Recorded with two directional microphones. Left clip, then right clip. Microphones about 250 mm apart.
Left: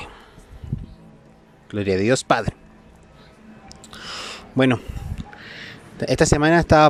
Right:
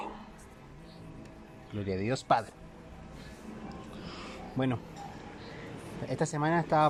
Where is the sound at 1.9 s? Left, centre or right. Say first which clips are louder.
Left 11 dB; left.